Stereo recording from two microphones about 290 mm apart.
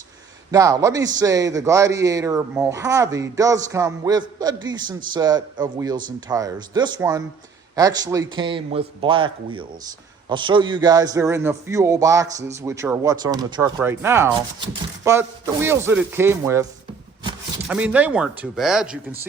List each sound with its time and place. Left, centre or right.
0.5 s a man's voice: centre
17.7 s speech: centre